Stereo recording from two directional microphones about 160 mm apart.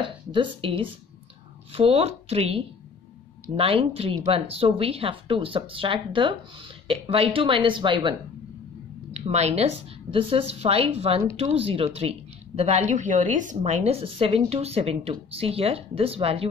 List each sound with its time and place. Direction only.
0.0 s speech: 30° right (ahead or behind)
9.1 s a woman's voice: 40° right (ahead or behind)